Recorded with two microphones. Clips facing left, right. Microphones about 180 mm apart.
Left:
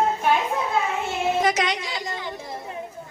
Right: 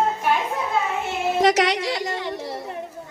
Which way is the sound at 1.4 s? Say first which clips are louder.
Right 5 dB; 75° right (ahead or behind).